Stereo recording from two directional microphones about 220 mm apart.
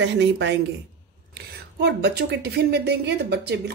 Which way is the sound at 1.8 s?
50° right (ahead or behind).